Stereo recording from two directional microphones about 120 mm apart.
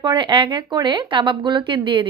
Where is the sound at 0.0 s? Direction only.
40° right (ahead or behind).